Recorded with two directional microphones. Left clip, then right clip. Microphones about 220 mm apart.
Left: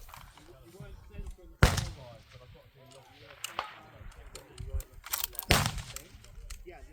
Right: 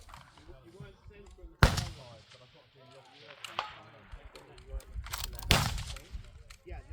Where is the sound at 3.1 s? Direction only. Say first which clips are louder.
Left 2 dB; 50° right (ahead or behind).